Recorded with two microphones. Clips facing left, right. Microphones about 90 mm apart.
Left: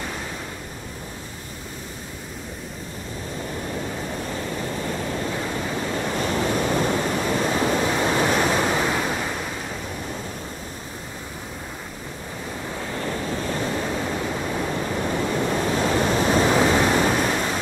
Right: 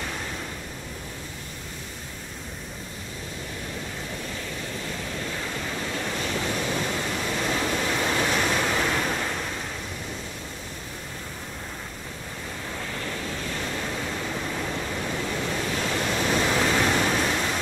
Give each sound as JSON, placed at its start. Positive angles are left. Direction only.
{"t": 4.4, "sound": "waves", "side_deg": 35}
{"t": 6.1, "sound": "waves", "side_deg": 40}
{"t": 12.9, "sound": "waves", "side_deg": 30}
{"t": 16.5, "sound": "waves", "side_deg": 20}